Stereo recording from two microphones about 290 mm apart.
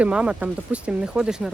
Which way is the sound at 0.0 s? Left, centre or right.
Centre.